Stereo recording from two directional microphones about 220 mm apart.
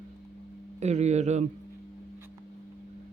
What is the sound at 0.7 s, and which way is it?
Speech, 30° right (ahead or behind).